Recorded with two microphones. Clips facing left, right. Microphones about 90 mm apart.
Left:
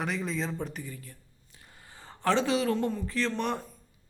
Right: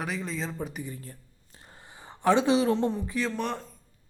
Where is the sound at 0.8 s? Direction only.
30° right (ahead or behind).